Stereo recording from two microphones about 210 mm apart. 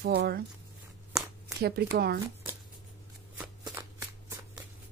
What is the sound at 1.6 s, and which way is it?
Speech, 50° right (ahead or behind).